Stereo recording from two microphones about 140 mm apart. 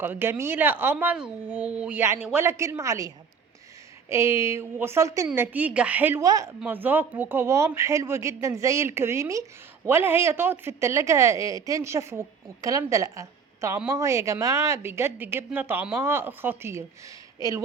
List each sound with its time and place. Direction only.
0.0 s a woman's voice: 15° right (ahead or behind)
4.1 s speech: 20° right (ahead or behind)
6.2 s a woman's voice: 25° right (ahead or behind)
6.6 s a woman's voice: 15° right (ahead or behind)